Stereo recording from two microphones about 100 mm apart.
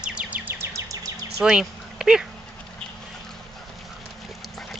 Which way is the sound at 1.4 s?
5° right (ahead or behind).